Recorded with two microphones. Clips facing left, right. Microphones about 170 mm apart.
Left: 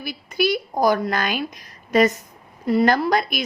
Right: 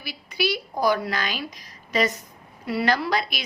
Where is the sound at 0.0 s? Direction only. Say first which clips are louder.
Left 5 dB; 50° left (ahead or behind).